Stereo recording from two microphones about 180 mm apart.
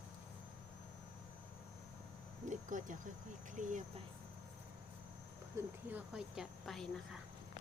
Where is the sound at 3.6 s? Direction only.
45° right (ahead or behind).